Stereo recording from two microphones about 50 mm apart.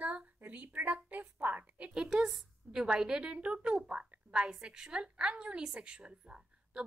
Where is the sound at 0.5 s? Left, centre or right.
Right.